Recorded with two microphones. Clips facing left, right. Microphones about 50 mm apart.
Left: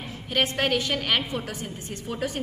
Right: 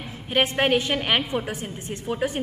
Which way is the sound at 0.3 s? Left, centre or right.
Right.